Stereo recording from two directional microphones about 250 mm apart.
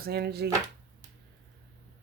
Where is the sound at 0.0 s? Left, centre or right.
Right.